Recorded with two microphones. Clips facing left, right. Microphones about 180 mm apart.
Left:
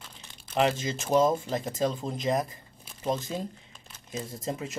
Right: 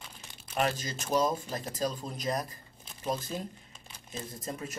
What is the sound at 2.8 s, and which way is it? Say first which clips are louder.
Crumpling: left 4 dB; 5° left (ahead or behind).